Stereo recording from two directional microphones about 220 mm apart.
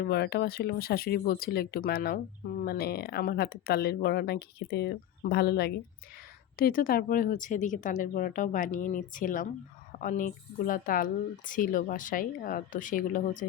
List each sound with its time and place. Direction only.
0.0 s speech: 50° left (ahead or behind)